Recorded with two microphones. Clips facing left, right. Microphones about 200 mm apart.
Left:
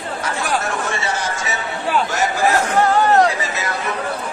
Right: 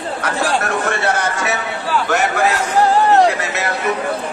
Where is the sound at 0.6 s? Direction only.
60° right (ahead or behind).